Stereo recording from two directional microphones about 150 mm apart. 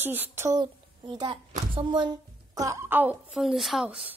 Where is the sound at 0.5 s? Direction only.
30° right (ahead or behind).